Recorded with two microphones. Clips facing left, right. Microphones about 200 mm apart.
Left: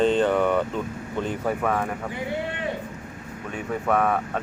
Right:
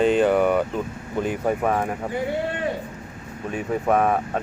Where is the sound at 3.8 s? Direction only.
25° right (ahead or behind).